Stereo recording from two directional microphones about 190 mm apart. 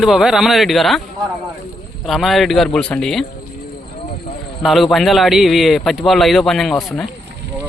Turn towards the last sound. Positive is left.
turn(degrees=0)  # may be behind; listen again after turning